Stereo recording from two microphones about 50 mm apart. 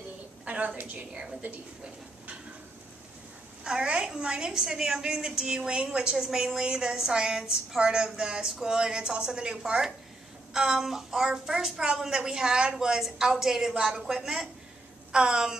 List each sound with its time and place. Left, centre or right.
0.5 s a sound: right
0.9 s a woman's voice: right
3.6 s a woman's voice: centre